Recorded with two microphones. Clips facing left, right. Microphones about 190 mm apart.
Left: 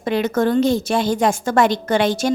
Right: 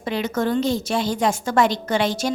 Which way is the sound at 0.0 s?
55° left (ahead or behind).